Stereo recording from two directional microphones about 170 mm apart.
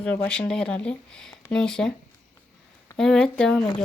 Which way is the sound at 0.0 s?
5° left (ahead or behind).